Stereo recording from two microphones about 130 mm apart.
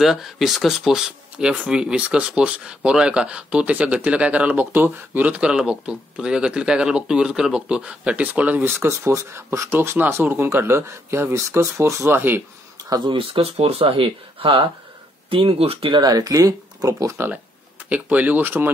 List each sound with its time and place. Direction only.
0.0 s speech: centre (ahead or behind); by 12.4 s 15° right (ahead or behind)
12.9 s speech: 35° right (ahead or behind)
16.0 s speech: 30° right (ahead or behind)
17.8 s speech: 10° right (ahead or behind)